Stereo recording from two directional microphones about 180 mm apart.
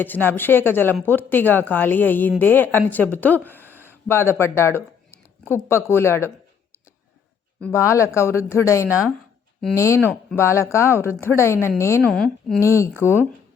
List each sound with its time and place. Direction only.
0.0 s speech: 10° left (ahead or behind)
3.6 s a sound: 10° right (ahead or behind)
3.8 s speech: 15° left (ahead or behind)
7.7 s speech: 15° left (ahead or behind)
12.6 s speech: 15° left (ahead or behind)